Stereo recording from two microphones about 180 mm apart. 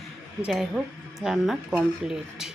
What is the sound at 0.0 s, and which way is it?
Speech, centre (ahead or behind).